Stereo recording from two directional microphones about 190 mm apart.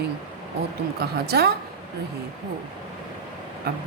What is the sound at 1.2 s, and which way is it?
Speech, 55° right (ahead or behind).